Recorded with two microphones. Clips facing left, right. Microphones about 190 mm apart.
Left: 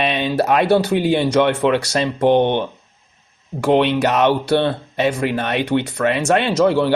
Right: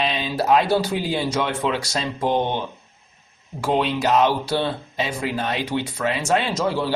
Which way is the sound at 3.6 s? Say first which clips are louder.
Left 6 dB; 65° left (ahead or behind).